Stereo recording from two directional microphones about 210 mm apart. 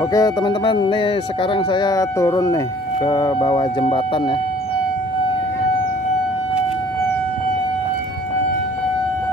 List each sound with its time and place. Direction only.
0.1 s speech: 20° left (ahead or behind)